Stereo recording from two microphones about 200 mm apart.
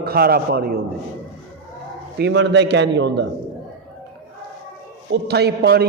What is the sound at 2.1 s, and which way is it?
A man's voice, 60° right (ahead or behind).